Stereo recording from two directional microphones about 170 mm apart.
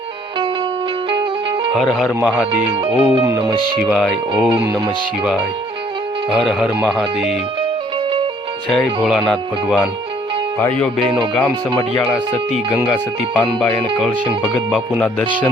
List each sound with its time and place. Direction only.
1.7 s speech: centre (ahead or behind)
2.8 s speech: 30° right (ahead or behind)
3.8 s speech: 5° right (ahead or behind)
6.3 s speech: centre (ahead or behind)
8.7 s speech: centre (ahead or behind)
14.0 s speech: centre (ahead or behind)